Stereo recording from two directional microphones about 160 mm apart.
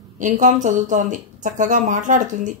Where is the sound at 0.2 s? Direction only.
50° right (ahead or behind).